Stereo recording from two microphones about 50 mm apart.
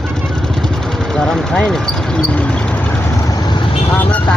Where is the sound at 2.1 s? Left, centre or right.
Left.